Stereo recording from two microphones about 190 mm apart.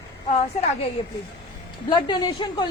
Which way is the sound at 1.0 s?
25° left (ahead or behind).